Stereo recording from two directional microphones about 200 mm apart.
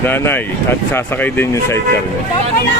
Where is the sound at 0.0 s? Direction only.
10° left (ahead or behind).